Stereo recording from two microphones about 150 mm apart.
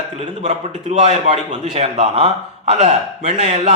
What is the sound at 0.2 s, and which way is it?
A man's voice, 50° right (ahead or behind).